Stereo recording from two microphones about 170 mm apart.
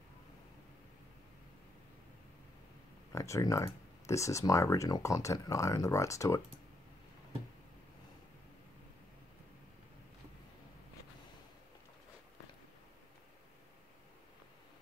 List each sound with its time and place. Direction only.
3.1 s speech: 20° left (ahead or behind)